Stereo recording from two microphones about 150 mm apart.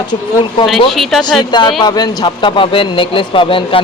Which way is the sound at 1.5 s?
30° left (ahead or behind).